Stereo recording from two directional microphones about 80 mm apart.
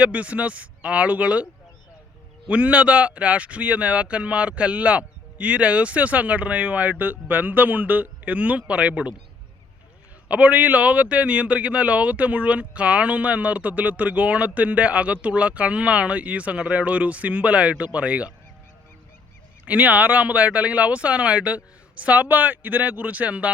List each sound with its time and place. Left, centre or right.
0.0 s speech: centre
2.5 s a man's voice: centre
10.2 s speech: centre
19.6 s speech: centre